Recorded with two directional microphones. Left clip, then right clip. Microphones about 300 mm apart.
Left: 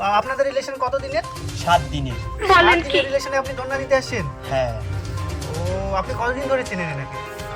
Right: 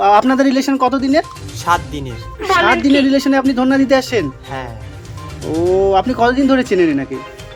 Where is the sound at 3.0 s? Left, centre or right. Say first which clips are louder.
Right 6 dB; right.